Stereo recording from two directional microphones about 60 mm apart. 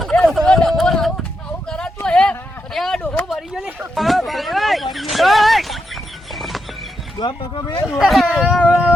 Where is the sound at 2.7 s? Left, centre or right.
Centre.